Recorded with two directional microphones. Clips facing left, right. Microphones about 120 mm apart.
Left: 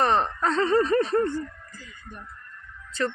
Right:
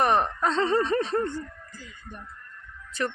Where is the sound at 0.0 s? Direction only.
15° right (ahead or behind).